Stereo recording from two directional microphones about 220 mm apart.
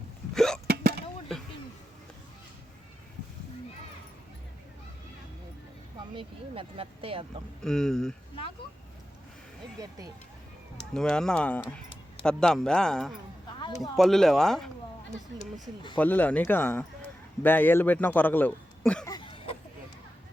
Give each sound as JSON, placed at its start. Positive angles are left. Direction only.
{"t": 0.3, "sound": "hiccup", "side_deg": 0}
{"t": 0.7, "sound": "vehicle", "side_deg": -45}
{"t": 6.1, "sound": "speech", "side_deg": -25}
{"t": 7.6, "sound": "speech", "side_deg": 0}
{"t": 10.9, "sound": "speech", "side_deg": 0}
{"t": 13.6, "sound": "speech", "side_deg": 20}
{"t": 13.9, "sound": "speech", "side_deg": 0}
{"t": 16.0, "sound": "a man's voice", "side_deg": 10}
{"t": 19.0, "sound": "a sound", "side_deg": 20}